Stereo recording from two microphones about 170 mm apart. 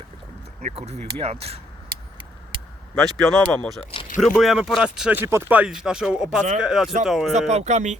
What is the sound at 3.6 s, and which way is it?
Speech, 5° left (ahead or behind).